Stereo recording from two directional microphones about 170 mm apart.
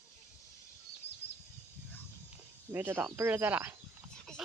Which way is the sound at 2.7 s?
10° right (ahead or behind).